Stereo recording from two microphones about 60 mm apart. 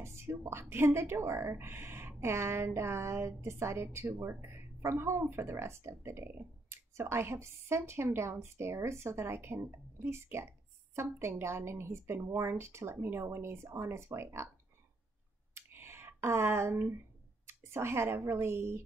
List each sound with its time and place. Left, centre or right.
0.0 s speech: right
15.5 s a sound: right
17.5 s speech: right